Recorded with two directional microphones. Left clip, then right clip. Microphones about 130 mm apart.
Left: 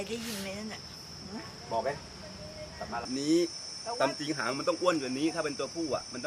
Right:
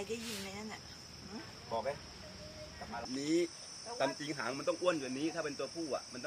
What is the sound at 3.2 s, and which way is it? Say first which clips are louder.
Speech: left 6 dB; 5° left (ahead or behind).